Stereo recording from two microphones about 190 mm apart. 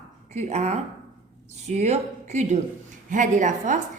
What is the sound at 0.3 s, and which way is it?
A woman's voice, 35° right (ahead or behind).